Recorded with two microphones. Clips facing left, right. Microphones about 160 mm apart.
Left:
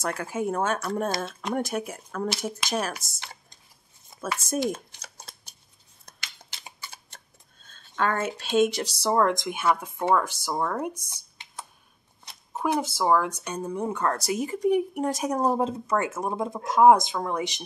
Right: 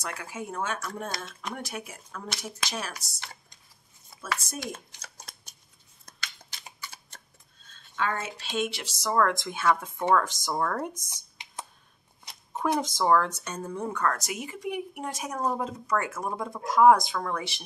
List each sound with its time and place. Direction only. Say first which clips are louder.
0.0 s speech: left 8 dB; 50° left (ahead or behind)
1.0 s speech: left 8 dB; 30° left (ahead or behind)
1.5 s speech: left 10 dB; 45° left (ahead or behind)
4.2 s speech: left 2 dB; 50° left (ahead or behind)
5.1 s scissors: left 2 dB; 30° left (ahead or behind)
6.0 s a sound: right 2 dB; 30° left (ahead or behind)
7.7 s speech: left 4 dB; 50° left (ahead or behind); by 11.1 s 10° left (ahead or behind)
11.1 s a sound: even; 15° right (ahead or behind)
12.5 s speech: left 1 dB; 10° left (ahead or behind)